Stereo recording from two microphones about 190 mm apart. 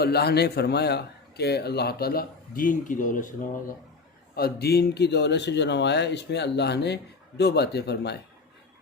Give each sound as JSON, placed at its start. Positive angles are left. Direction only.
{"t": 0.0, "sound": "speech", "side_deg": 55}
{"t": 4.4, "sound": "speech", "side_deg": 55}